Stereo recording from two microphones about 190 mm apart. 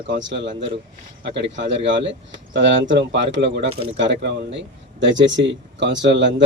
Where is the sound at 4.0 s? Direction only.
65° right (ahead or behind).